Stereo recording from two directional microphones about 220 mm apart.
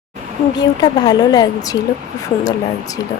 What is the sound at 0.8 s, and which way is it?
Speech, 20° left (ahead or behind).